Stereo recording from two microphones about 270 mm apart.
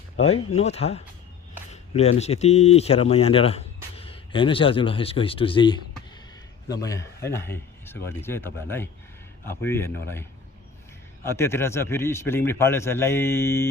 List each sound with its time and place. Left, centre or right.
0.5 s a man's voice: left